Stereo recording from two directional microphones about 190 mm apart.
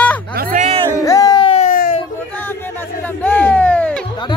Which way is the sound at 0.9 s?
15° left (ahead or behind).